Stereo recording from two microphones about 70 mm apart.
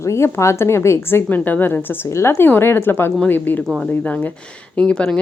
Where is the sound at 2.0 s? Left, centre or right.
Left.